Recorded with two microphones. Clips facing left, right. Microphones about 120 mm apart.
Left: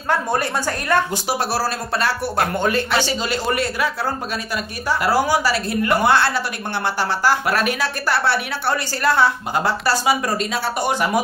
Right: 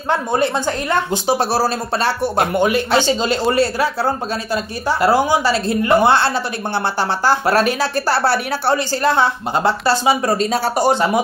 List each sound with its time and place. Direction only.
0.1 s speech: 25° right (ahead or behind)
2.9 s a woman's voice: 25° right (ahead or behind)
8.7 s speech: 25° right (ahead or behind)